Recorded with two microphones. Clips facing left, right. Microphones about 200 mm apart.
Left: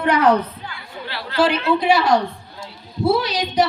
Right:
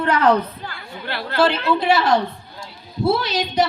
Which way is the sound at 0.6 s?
50° right (ahead or behind).